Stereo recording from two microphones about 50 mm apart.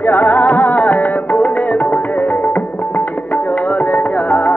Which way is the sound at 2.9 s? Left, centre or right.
Left.